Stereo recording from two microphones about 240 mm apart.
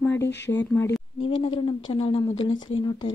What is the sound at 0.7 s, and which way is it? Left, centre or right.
Speech, centre.